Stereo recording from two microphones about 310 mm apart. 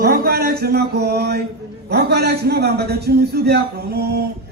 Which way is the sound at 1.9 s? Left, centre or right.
Right.